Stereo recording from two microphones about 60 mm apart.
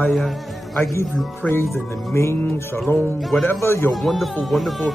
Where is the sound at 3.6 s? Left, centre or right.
Left.